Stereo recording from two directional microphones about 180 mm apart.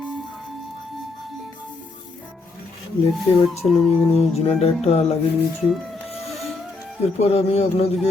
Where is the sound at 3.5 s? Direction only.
35° left (ahead or behind).